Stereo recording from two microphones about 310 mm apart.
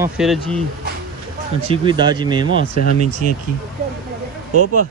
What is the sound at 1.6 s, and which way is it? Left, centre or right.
Speech, centre.